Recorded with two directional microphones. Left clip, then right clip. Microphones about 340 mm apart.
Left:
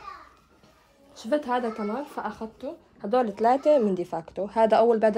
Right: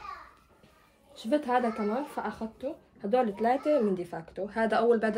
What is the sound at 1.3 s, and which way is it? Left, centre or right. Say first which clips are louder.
Speech: left 1 dB; centre.